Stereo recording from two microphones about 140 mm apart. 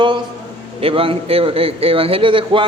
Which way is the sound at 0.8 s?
40° right (ahead or behind).